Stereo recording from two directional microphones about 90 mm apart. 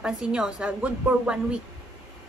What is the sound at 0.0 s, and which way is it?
A woman's voice, 10° right (ahead or behind).